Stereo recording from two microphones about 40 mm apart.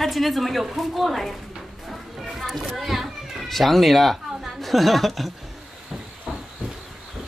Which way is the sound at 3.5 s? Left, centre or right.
Centre.